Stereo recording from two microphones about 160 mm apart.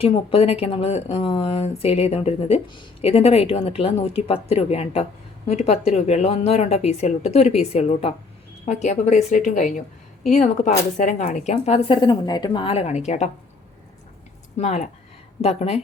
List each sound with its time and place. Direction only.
0.0 s a woman's voice: 35° left (ahead or behind)
14.6 s a woman's voice: 45° left (ahead or behind)